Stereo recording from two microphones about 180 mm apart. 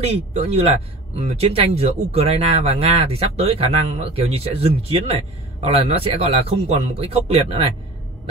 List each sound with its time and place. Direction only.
0.0 s speech: 35° right (ahead or behind)